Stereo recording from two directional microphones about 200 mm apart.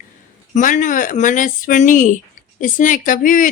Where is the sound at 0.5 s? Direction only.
40° left (ahead or behind).